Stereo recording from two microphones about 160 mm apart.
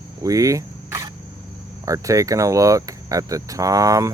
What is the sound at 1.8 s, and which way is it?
Speech, 20° right (ahead or behind).